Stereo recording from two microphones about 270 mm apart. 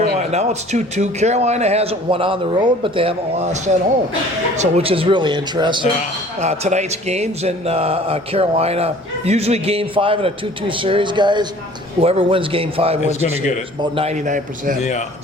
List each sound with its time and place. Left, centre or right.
0.3 s a man's voice: right
13.0 s a man's voice: left
13.9 s a man's voice: right
14.8 s a man's voice: left